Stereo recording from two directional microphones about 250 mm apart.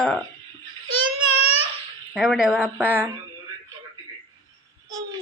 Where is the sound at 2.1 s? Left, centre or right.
Centre.